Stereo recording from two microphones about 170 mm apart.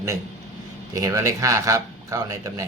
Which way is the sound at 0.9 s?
20° right (ahead or behind).